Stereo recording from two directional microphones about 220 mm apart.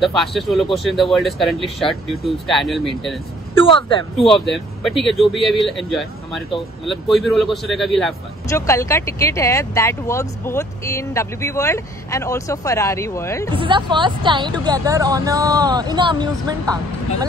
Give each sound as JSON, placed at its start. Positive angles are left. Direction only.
{"t": 0.0, "sound": "speech", "side_deg": 0}
{"t": 3.5, "sound": "speech", "side_deg": 25}
{"t": 4.3, "sound": "speech", "side_deg": 0}
{"t": 8.5, "sound": "speech", "side_deg": 15}
{"t": 13.6, "sound": "speech", "side_deg": -20}